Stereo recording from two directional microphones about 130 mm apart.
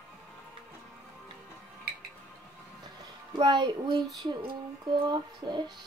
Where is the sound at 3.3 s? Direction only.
35° right (ahead or behind).